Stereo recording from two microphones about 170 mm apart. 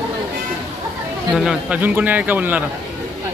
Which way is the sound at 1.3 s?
5° right (ahead or behind).